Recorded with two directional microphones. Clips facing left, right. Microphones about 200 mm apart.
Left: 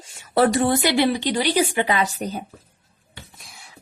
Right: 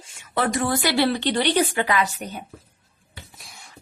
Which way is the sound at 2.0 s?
30° left (ahead or behind).